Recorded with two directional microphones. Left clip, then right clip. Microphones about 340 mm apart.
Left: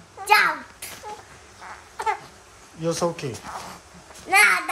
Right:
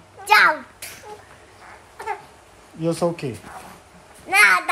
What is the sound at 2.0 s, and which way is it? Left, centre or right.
Babbling, left.